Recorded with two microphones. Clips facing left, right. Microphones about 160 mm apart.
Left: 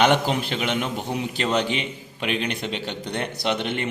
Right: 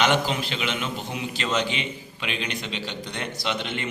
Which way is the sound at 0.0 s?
55° left (ahead or behind).